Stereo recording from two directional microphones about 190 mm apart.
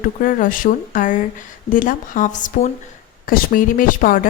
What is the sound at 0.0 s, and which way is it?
A woman's voice, 45° left (ahead or behind).